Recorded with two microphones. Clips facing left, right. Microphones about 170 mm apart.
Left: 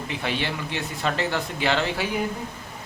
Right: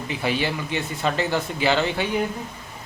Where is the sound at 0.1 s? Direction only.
Centre (ahead or behind).